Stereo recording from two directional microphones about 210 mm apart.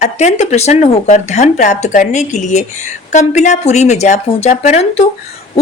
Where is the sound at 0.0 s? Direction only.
35° left (ahead or behind).